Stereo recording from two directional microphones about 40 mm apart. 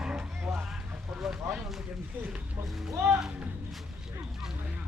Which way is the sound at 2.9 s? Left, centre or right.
Right.